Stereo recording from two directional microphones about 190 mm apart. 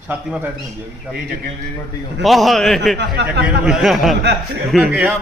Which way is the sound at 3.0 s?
65° right (ahead or behind).